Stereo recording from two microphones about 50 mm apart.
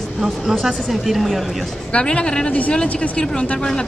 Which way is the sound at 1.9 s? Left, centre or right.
Centre.